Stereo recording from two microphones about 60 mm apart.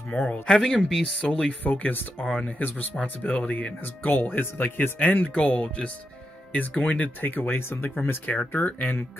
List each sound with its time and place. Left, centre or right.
0.1 s speech: left
0.6 s speech: centre
1.2 s speech: centre
1.6 s speech: left
3.0 s speech: centre